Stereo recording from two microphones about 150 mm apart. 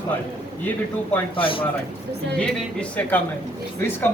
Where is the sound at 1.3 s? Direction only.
35° left (ahead or behind).